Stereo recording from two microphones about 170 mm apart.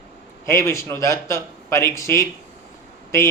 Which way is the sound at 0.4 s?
15° left (ahead or behind).